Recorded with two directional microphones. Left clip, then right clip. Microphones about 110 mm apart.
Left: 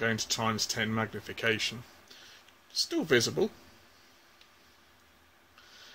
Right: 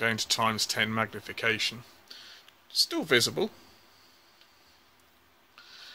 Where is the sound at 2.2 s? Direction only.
55° right (ahead or behind).